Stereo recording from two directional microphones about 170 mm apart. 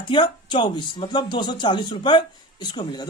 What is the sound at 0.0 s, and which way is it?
Speech, 30° left (ahead or behind).